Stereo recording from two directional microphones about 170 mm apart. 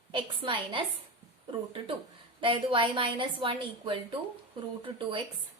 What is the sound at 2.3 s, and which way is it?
A woman's voice, 30° right (ahead or behind).